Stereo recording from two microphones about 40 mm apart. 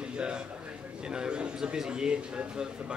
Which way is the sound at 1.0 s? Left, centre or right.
Right.